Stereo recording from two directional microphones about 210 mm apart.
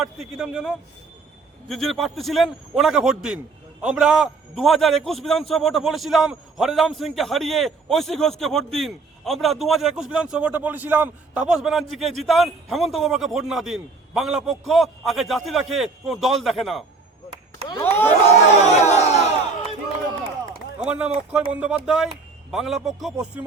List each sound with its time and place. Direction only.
0.0 s a man's voice: centre (ahead or behind)
17.7 s speech: 15° left (ahead or behind)
18.5 s crowd: 30° left (ahead or behind)
20.8 s a man's voice: 5° right (ahead or behind)